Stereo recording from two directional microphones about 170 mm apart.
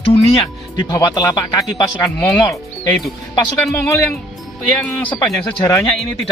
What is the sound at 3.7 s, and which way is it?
Speech, 15° left (ahead or behind).